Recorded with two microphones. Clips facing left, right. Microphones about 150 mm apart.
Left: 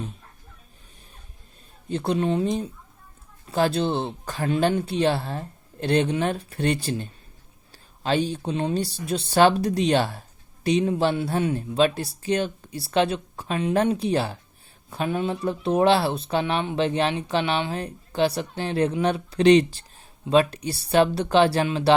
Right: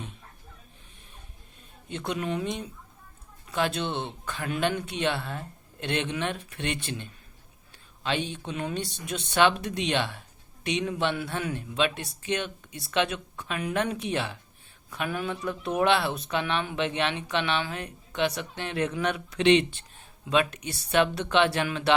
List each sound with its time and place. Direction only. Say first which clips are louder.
1.9 s speech: left 7 dB; 35° left (ahead or behind)